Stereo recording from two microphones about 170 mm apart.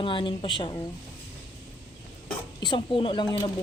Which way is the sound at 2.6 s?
30° left (ahead or behind).